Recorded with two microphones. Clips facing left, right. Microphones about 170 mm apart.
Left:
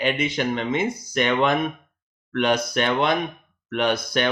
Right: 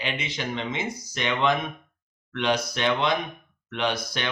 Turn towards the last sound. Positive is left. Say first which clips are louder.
# left 6 dB
turn(degrees=50)  # may be behind; listen again after turning